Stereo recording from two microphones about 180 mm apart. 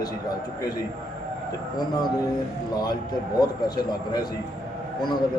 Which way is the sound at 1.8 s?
20° left (ahead or behind).